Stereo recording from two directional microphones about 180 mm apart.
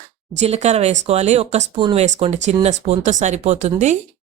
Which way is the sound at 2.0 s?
40° right (ahead or behind).